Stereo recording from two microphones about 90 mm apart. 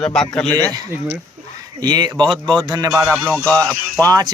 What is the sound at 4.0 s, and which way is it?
Speech, 45° right (ahead or behind).